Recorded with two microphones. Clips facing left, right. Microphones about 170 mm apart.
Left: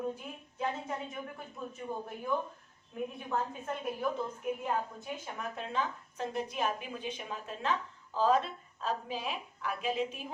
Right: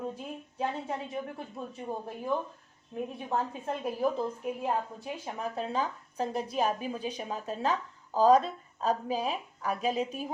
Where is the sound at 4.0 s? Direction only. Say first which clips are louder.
Right 5 dB; 35° right (ahead or behind).